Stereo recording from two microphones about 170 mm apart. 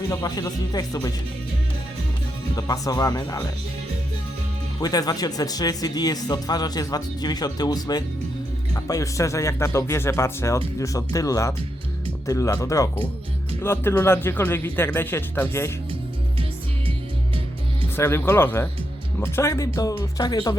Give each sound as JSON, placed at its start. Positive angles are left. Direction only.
{"t": 0.1, "sound": "speech", "side_deg": 20}
{"t": 2.6, "sound": "speech", "side_deg": 20}
{"t": 4.8, "sound": "speech", "side_deg": 20}
{"t": 17.9, "sound": "speech", "side_deg": 15}